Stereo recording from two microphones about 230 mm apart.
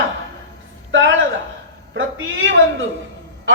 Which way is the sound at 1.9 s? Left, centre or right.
Right.